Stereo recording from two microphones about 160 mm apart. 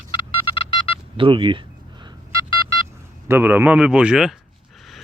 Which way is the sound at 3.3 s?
10° right (ahead or behind).